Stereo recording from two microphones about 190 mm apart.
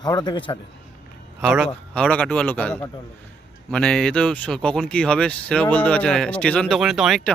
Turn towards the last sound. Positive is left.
turn(degrees=0)  # may be behind; listen again after turning